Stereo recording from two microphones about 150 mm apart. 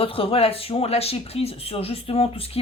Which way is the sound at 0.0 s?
40° left (ahead or behind).